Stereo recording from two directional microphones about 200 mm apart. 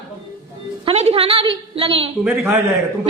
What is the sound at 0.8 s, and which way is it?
A woman's voice, 30° right (ahead or behind).